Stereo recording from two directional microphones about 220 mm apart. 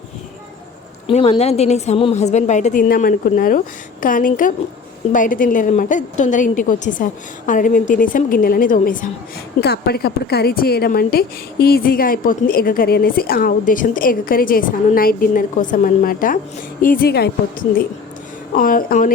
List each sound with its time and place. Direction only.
1.0 s a woman's voice: 25° left (ahead or behind); by 17.3 s 45° left (ahead or behind)
18.5 s a woman's voice: 40° left (ahead or behind)